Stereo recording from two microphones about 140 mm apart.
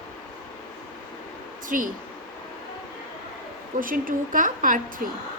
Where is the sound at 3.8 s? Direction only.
80° right.